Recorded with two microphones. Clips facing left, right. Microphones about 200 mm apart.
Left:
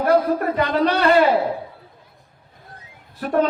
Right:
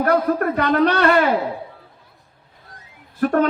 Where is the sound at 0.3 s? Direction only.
60° right (ahead or behind).